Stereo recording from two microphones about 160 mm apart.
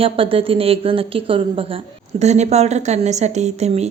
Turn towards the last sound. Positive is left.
turn(degrees=-40)  # may be behind; listen again after turning